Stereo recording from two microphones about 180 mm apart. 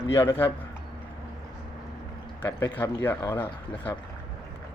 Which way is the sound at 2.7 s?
10° left (ahead or behind).